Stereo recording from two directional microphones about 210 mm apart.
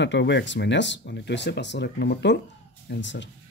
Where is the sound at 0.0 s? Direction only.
55° left (ahead or behind).